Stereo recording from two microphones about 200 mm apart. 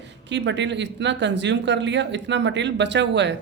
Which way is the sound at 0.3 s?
60° right (ahead or behind).